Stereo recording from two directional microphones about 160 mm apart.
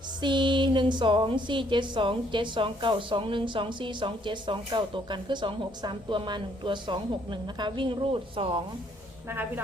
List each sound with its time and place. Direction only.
0.2 s a woman's voice: 30° right (ahead or behind)